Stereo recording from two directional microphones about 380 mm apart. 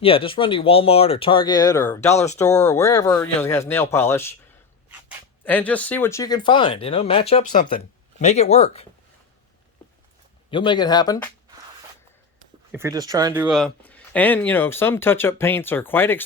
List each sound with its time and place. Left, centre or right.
0.0 s speech: centre
10.5 s speech: centre
12.7 s speech: centre